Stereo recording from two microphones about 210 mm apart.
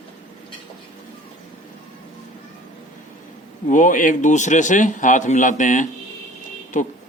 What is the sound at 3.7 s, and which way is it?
Speech, 40° left (ahead or behind).